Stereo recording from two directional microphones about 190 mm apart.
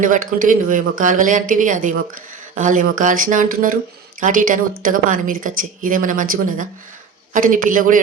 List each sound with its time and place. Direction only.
0.0 s speech: 45° right (ahead or behind)